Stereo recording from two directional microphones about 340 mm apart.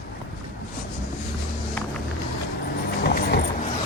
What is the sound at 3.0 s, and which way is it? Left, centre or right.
Dog, left.